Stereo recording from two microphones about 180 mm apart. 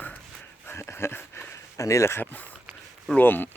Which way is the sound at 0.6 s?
15° left (ahead or behind).